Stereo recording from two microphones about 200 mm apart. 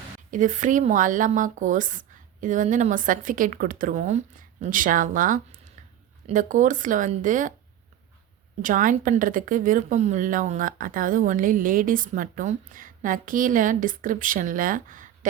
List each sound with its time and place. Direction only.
0.3 s a woman's voice: 40° right (ahead or behind)
8.6 s a woman's voice: 40° right (ahead or behind)